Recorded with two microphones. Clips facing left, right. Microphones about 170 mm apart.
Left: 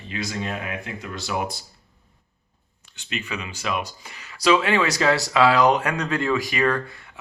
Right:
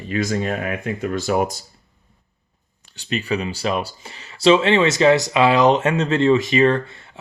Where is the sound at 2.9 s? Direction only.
35° right (ahead or behind).